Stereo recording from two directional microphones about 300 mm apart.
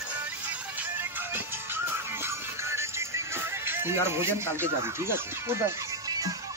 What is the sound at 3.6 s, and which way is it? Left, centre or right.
Speech, centre.